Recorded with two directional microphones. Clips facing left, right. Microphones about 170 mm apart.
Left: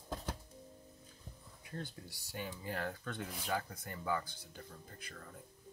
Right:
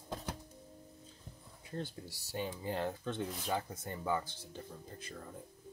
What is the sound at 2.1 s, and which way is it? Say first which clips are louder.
Speech: right 6 dB; 25° right (ahead or behind).